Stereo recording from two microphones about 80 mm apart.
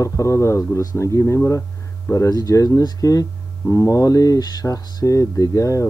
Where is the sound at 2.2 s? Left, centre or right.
Left.